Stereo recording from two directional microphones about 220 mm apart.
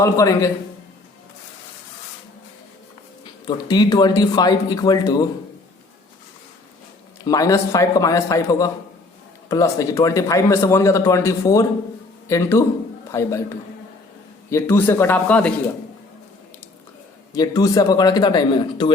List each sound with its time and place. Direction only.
0.0 s speech: 15° left (ahead or behind)
3.4 s speech: 20° left (ahead or behind)
7.3 s a woman's voice: 15° left (ahead or behind)
14.5 s speech: 10° left (ahead or behind)
17.3 s speech: 15° left (ahead or behind)